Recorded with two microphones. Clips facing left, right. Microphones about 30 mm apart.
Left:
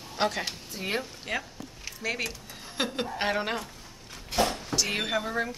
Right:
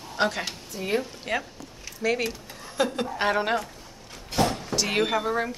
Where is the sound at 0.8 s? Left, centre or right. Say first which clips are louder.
Right 5 dB; centre.